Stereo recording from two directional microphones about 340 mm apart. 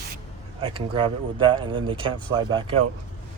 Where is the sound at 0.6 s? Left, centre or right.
Centre.